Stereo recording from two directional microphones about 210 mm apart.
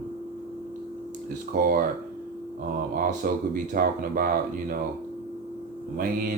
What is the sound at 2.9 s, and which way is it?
Speech, 40° right (ahead or behind).